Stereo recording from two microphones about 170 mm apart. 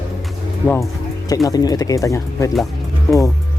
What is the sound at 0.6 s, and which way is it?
Speech, 15° left (ahead or behind).